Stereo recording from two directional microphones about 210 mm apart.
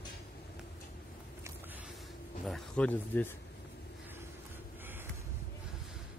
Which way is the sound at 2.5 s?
5° left (ahead or behind).